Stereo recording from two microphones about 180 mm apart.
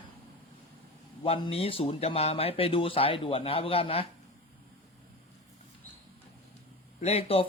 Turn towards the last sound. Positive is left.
turn(degrees=35)  # may be behind; listen again after turning